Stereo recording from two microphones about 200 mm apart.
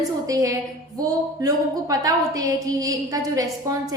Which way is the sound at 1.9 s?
20° right (ahead or behind).